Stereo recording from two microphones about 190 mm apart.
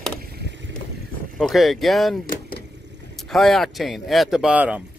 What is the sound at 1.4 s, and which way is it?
Speech, centre (ahead or behind).